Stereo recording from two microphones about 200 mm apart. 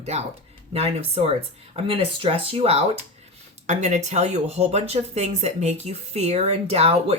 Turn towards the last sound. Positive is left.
turn(degrees=-30)  # may be behind; listen again after turning